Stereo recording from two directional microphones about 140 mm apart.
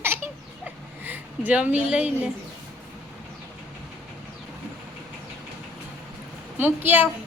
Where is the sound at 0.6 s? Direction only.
10° right (ahead or behind).